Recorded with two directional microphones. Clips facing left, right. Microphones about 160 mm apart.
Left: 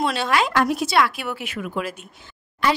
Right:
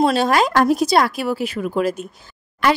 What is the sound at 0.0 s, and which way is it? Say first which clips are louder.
A woman's voice: right 5 dB; 40° right (ahead or behind).